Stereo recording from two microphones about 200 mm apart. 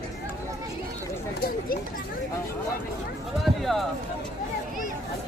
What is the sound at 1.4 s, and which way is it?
Speech, 45° left (ahead or behind).